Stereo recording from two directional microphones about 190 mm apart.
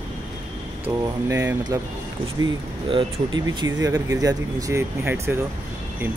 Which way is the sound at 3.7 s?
15° right (ahead or behind).